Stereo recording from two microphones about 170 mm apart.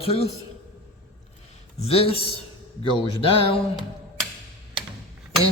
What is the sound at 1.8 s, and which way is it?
A man's voice, 35° left (ahead or behind).